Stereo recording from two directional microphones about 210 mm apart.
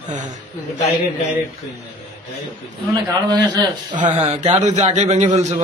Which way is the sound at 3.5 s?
20° right (ahead or behind).